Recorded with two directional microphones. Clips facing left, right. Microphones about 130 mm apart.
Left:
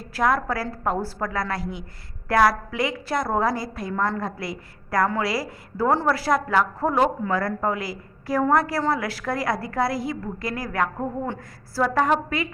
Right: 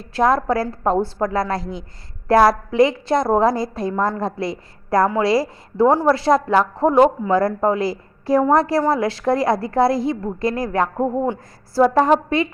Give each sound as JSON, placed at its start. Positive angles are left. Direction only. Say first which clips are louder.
{"t": 0.0, "sound": "a woman's voice", "louder": "right 5 dB", "side_deg": -25}